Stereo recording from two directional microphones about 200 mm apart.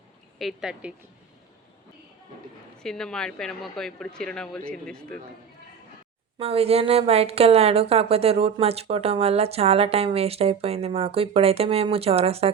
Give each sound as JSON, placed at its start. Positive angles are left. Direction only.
{"t": 0.3, "sound": "speech", "side_deg": 0}
{"t": 2.8, "sound": "speech", "side_deg": 5}
{"t": 6.4, "sound": "a woman's voice", "side_deg": -30}